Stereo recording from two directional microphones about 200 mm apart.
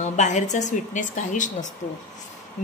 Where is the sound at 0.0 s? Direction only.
35° left (ahead or behind).